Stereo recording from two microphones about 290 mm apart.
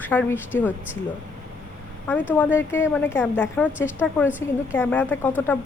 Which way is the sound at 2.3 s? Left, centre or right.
Centre.